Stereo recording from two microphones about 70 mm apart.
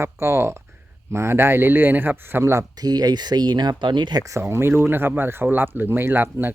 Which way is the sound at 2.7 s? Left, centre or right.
Right.